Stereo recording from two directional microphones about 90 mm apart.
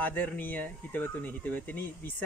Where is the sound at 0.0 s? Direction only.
20° left (ahead or behind).